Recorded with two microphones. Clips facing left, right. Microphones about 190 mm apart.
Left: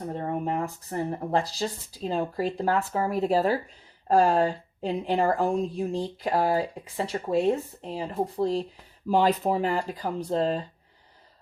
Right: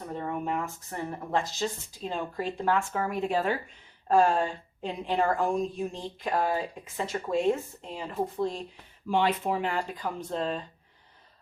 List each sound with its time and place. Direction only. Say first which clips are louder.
0.1 s a woman's voice: left 2 dB; 35° left (ahead or behind)